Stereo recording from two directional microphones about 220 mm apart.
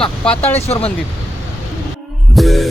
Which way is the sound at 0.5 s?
30° left (ahead or behind).